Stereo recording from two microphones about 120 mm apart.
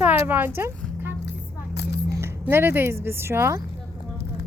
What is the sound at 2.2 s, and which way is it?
A woman's voice, 20° right (ahead or behind).